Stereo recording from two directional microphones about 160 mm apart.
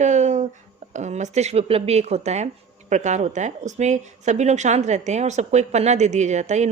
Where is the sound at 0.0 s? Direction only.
45° right (ahead or behind).